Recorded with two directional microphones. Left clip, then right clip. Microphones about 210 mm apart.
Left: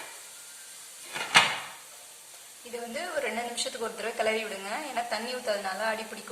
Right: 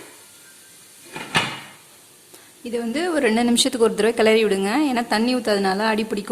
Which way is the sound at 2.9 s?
55° right (ahead or behind).